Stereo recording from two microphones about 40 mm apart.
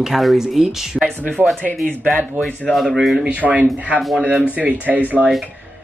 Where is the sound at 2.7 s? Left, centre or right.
Centre.